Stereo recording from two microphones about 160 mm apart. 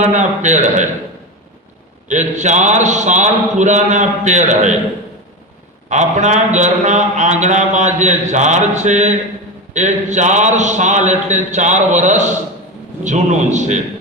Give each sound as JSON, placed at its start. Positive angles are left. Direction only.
{"t": 0.0, "sound": "a man's voice", "side_deg": -50}
{"t": 2.0, "sound": "a man's voice", "side_deg": -50}
{"t": 5.9, "sound": "a man's voice", "side_deg": -50}